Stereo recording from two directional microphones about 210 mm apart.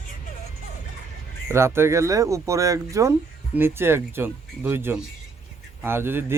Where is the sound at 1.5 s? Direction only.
10° right (ahead or behind).